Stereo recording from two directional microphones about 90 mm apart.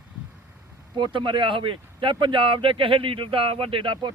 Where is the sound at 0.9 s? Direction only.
60° right (ahead or behind).